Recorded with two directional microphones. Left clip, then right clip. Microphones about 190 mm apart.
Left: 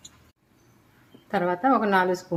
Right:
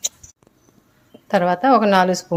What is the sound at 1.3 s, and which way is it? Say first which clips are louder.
Speech: right 7 dB; 50° right (ahead or behind).